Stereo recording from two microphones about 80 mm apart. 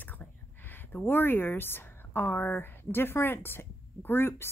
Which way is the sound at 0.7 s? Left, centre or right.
Left.